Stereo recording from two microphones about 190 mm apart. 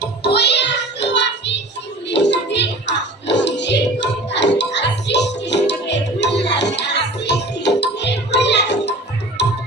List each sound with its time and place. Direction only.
0.0 s child singing: 60° left (ahead or behind)
2.0 s music: 65° left (ahead or behind)